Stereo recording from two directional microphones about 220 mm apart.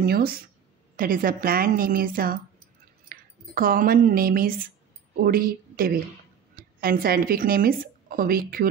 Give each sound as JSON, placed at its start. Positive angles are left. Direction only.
{"t": 0.0, "sound": "a woman's voice", "side_deg": -45}